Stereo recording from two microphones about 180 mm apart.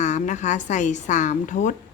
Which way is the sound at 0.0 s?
40° left (ahead or behind).